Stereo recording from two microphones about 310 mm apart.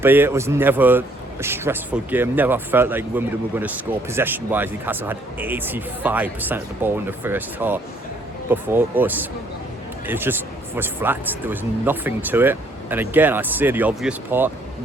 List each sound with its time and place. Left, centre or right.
0.0 s speech: centre